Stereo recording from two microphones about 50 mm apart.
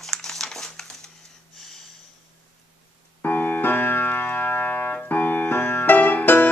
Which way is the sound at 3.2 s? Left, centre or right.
Left.